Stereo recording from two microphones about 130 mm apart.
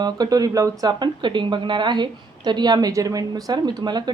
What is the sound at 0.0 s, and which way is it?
Speech, 30° right (ahead or behind).